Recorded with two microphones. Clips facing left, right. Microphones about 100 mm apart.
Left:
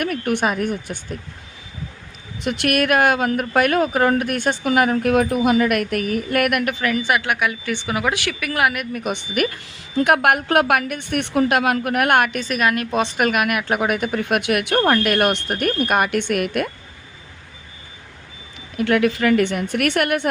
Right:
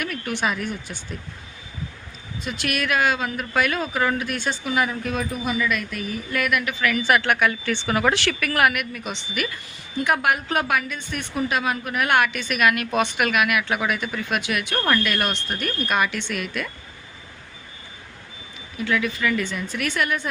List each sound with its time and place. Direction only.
0.0 s speech: 50° left (ahead or behind)
2.4 s a woman's voice: 60° left (ahead or behind)
7.0 s speech: 15° left (ahead or behind)
8.9 s speech: 50° left (ahead or behind)
9.9 s a woman's voice: 65° left (ahead or behind)
18.8 s a woman's voice: 60° left (ahead or behind)